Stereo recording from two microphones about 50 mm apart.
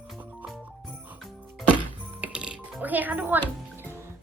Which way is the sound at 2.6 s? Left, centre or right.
Right.